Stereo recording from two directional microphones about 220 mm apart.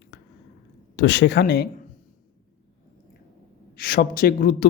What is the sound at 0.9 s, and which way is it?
Speech, 55° left (ahead or behind).